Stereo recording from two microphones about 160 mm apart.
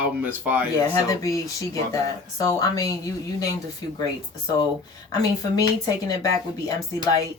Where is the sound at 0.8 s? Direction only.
20° left (ahead or behind).